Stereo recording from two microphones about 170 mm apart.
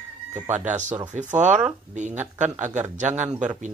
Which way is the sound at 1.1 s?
45° right (ahead or behind).